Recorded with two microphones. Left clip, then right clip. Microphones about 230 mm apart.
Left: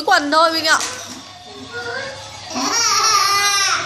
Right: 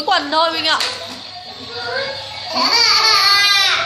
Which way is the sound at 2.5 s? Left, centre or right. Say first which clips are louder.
Right 4 dB; centre.